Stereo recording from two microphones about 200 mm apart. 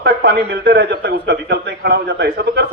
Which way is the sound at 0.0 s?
60° right (ahead or behind).